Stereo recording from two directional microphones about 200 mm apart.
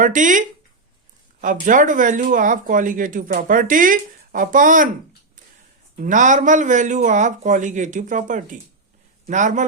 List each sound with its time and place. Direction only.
0.0 s speech: 40° right (ahead or behind)
1.6 s speech: 40° right (ahead or behind)
6.0 s speech: 40° right (ahead or behind)